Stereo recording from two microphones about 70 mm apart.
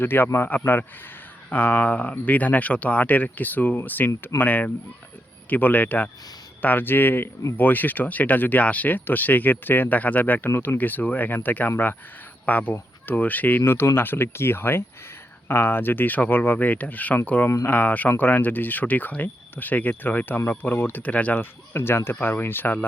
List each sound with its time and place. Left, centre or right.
0.0 s speech: left
10.5 s speech: left
10.8 s speech: left
13.7 s speech: left
21.7 s speech: left